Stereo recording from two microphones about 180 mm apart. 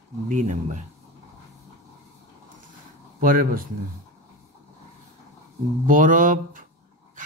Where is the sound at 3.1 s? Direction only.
50° right (ahead or behind).